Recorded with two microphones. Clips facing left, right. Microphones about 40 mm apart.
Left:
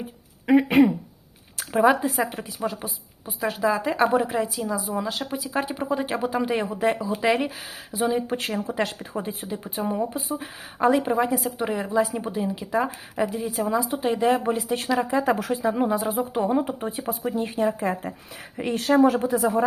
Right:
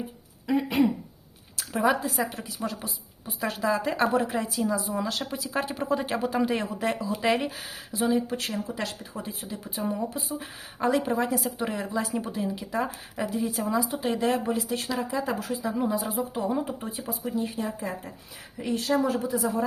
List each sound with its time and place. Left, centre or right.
0.4 s speech: left
1.5 s speech: left
2.6 s a woman's voice: centre
8.3 s a woman's voice: left; by 14.4 s centre
14.4 s speech: left
15.2 s speech: left
15.6 s speech: left